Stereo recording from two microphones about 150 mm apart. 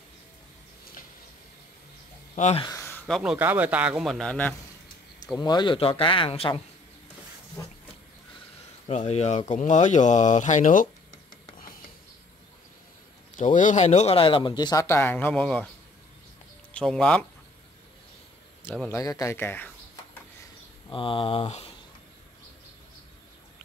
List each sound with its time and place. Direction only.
2.3 s speech: 50° left (ahead or behind)
3.1 s a man's voice: 5° right (ahead or behind)
5.4 s speech: 30° left (ahead or behind)
8.8 s speech: 45° left (ahead or behind)
13.4 s speech: 60° left (ahead or behind); by 15.7 s 5° left (ahead or behind)
16.7 s speech: 5° left (ahead or behind)
18.6 s speech: 15° left (ahead or behind)
20.9 s speech: 35° left (ahead or behind)